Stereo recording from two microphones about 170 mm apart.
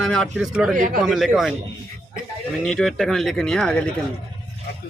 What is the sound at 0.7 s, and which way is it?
Speech, 50° right (ahead or behind).